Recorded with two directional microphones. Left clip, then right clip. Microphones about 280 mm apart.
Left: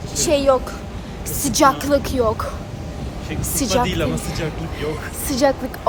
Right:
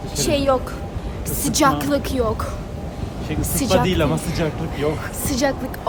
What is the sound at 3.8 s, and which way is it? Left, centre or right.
Speech, right.